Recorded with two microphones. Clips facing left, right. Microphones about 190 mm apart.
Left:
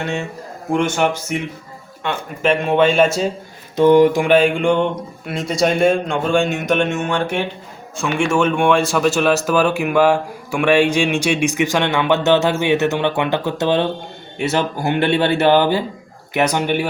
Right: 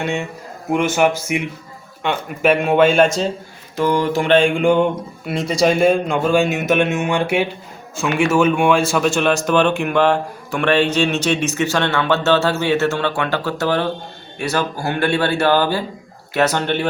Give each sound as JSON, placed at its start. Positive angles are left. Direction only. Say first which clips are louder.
{"t": 0.0, "sound": "a man's voice", "louder": "right 1 dB", "side_deg": -15}
{"t": 3.8, "sound": "speech", "louder": "left 6 dB", "side_deg": 20}